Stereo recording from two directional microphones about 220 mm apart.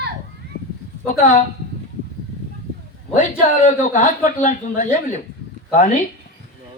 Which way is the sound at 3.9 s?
35° left (ahead or behind).